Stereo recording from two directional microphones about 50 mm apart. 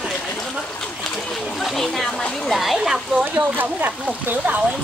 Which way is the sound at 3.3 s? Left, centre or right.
Right.